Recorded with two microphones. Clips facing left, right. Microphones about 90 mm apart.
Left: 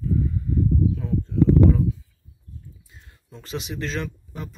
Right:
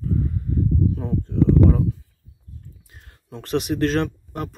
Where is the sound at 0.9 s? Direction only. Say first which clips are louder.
Even; 55° right (ahead or behind).